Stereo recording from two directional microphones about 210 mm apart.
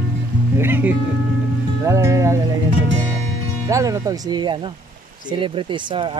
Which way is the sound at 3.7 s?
15° right (ahead or behind).